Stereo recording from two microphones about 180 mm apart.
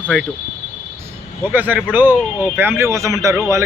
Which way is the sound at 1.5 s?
10° right (ahead or behind).